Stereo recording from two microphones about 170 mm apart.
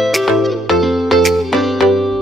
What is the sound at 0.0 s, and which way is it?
Music, centre (ahead or behind).